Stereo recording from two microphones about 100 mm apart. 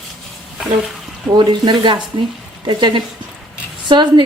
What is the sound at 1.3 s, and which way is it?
A woman's voice, 45° right (ahead or behind).